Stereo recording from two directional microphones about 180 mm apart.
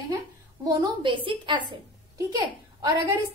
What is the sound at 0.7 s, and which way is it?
A woman's voice, 25° right (ahead or behind).